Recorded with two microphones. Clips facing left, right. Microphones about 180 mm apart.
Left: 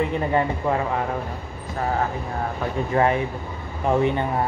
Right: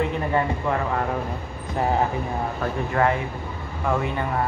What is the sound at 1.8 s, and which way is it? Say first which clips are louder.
Speech: right 2 dB; 20° right (ahead or behind).